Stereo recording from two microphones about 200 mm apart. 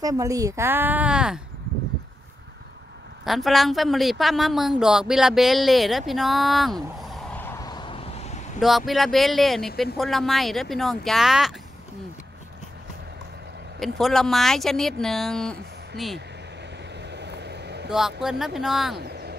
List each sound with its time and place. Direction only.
0.0 s speech: 15° right (ahead or behind)
3.3 s speech: centre (ahead or behind)
7.4 s vehicle: 15° left (ahead or behind)
8.5 s speech: centre (ahead or behind)
13.7 s speech: centre (ahead or behind)
17.1 s vehicle: 55° right (ahead or behind)
17.8 s speech: centre (ahead or behind)
18.9 s vehicle: 55° right (ahead or behind)